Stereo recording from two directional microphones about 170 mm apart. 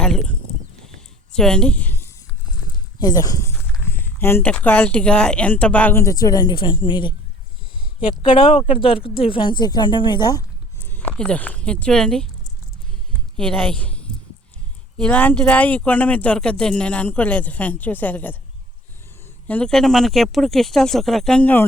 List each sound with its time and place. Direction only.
0.0 s speech: 5° left (ahead or behind)
0.9 s a sound: 5° left (ahead or behind)
3.0 s speech: 20° left (ahead or behind)
10.8 s speech: 10° left (ahead or behind)
13.3 s speech: 5° left (ahead or behind)
19.5 s speech: 5° left (ahead or behind)